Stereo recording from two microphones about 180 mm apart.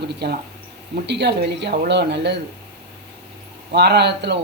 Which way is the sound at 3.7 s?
70° right (ahead or behind).